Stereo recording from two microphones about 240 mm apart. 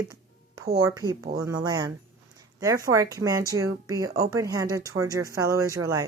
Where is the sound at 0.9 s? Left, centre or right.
Centre.